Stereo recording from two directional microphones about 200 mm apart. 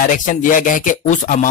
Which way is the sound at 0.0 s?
40° left (ahead or behind).